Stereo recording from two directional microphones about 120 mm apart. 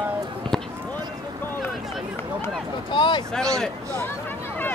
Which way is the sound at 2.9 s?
40° left (ahead or behind).